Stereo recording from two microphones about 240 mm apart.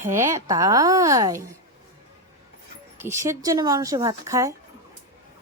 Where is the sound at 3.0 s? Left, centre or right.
Centre.